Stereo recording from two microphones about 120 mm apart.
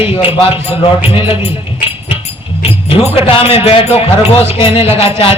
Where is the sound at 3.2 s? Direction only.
50° left (ahead or behind).